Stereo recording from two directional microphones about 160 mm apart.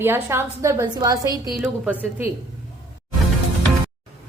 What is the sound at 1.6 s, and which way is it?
Speech, 10° right (ahead or behind).